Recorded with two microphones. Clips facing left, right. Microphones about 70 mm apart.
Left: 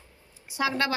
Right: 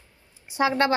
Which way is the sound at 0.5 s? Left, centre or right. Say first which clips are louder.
Right 5 dB; right.